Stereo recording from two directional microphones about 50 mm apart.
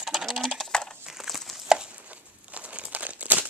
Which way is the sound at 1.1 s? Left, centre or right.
Centre.